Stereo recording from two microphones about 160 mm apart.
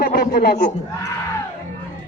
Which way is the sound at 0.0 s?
60° left (ahead or behind).